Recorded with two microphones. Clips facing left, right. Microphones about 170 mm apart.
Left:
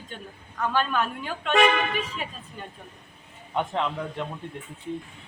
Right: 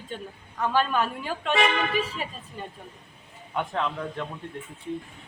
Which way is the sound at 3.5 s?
20° left (ahead or behind).